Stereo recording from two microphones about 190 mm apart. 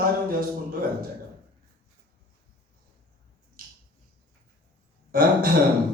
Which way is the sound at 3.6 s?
50° right (ahead or behind).